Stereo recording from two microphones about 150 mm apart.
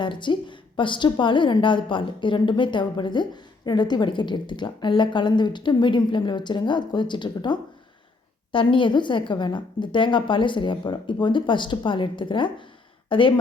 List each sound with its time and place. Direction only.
0.0 s a woman's voice: 30° left (ahead or behind)